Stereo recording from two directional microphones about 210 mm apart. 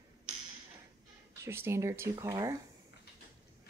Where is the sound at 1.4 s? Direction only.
10° right (ahead or behind).